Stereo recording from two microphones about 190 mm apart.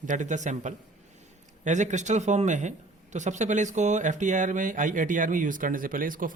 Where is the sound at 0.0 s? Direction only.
40° right (ahead or behind).